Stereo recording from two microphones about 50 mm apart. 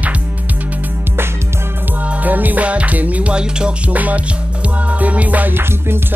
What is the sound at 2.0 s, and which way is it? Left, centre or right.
Music, right.